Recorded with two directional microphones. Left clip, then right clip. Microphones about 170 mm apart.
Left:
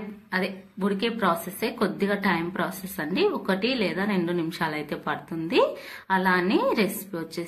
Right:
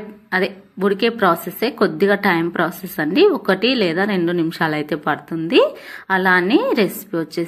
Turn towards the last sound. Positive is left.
turn(degrees=-35)  # may be behind; listen again after turning